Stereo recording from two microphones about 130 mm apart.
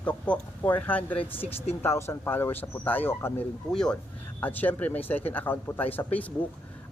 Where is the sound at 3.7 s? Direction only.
5° left (ahead or behind).